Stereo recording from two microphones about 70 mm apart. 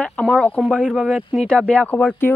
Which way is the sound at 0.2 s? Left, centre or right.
Centre.